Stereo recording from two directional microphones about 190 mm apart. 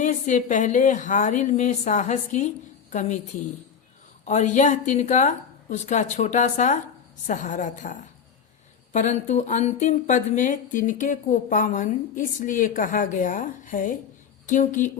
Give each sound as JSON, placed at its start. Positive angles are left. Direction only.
{"t": 0.0, "sound": "a woman's voice", "side_deg": 40}
{"t": 4.3, "sound": "a woman's voice", "side_deg": 40}